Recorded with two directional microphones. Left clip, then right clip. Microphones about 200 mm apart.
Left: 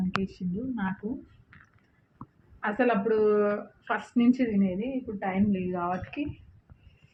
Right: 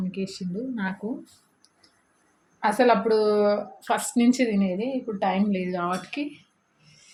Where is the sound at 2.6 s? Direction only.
30° right (ahead or behind).